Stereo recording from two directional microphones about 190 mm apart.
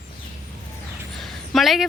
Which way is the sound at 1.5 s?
Centre (ahead or behind).